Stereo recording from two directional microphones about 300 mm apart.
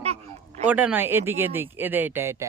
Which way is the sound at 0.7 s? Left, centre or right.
Centre.